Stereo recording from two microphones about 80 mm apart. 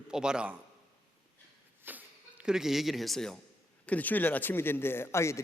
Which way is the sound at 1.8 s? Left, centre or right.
Right.